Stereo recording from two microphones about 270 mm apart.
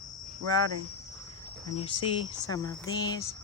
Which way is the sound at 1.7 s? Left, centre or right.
Centre.